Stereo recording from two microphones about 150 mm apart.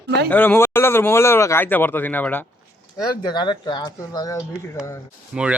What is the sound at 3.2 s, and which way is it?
Speech, 30° left (ahead or behind).